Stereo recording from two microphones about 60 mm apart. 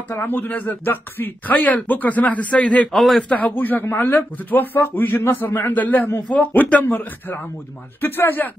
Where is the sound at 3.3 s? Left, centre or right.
Left.